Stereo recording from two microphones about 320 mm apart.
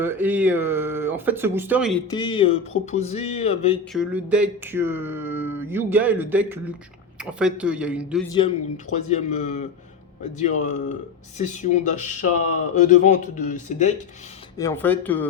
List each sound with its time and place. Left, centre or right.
0.0 s speech: centre
2.0 s speech: centre
3.9 s speech: centre
8.3 s speech: centre
14.6 s speech: centre